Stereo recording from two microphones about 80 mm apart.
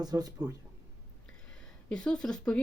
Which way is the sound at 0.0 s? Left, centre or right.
Right.